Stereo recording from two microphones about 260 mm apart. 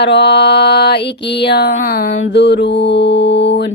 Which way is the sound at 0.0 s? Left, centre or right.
Left.